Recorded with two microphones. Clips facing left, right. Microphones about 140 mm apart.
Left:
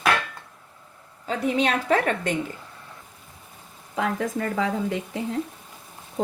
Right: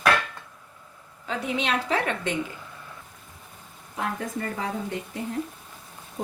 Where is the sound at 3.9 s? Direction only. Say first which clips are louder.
Left 5 dB; 90° left.